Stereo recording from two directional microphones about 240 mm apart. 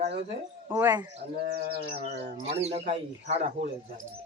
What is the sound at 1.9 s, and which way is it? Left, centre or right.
Speech, right.